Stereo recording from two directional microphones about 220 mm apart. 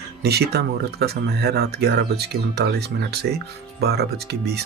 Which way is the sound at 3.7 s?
45° right (ahead or behind).